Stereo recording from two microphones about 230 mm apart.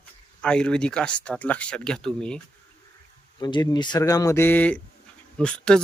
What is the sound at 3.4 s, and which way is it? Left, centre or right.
Speech, centre.